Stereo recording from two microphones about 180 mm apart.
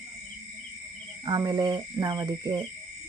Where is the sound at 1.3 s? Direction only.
20° right (ahead or behind).